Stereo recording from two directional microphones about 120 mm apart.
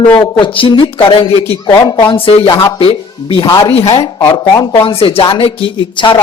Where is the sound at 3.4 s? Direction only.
25° left (ahead or behind).